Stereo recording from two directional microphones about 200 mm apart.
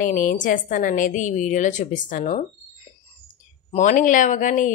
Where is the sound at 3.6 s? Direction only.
35° left (ahead or behind).